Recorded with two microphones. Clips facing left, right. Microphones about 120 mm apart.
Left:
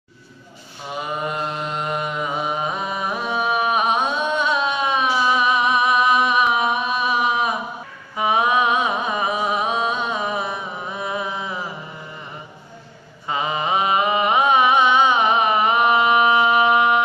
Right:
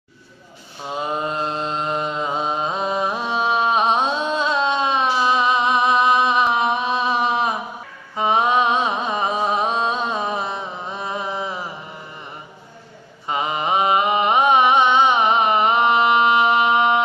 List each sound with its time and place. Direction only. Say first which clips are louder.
0.8 s mantra: right 2 dB; 25° right (ahead or behind)
13.3 s mantra: right 1 dB; 20° right (ahead or behind)